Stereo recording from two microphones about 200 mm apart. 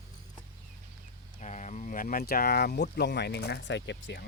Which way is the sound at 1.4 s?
35° left (ahead or behind).